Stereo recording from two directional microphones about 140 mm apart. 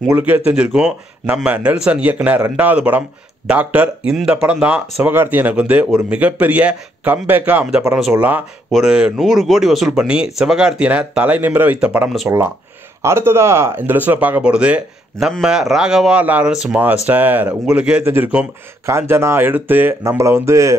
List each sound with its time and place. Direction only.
0.1 s speech: 10° right (ahead or behind)